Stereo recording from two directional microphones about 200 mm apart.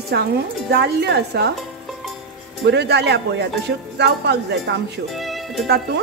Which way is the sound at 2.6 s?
55° right (ahead or behind).